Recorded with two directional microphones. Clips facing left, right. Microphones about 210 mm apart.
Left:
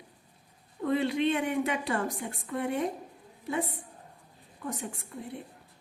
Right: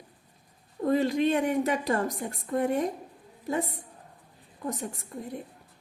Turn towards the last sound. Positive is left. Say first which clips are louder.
# right 3 dB
turn(degrees=-40)  # may be behind; listen again after turning